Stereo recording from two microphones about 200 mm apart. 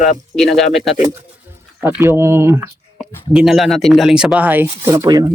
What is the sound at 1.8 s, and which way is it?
A man's voice, 10° right (ahead or behind).